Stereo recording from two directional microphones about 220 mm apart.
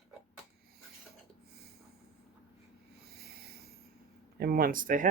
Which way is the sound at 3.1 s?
45° right (ahead or behind).